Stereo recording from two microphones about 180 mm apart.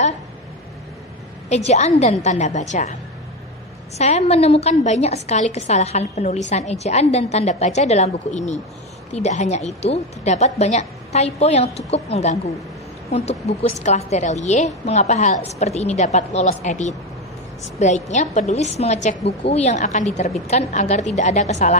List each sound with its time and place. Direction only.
1.5 s a woman's voice: 40° left (ahead or behind)
4.0 s a woman's voice: 35° left (ahead or behind)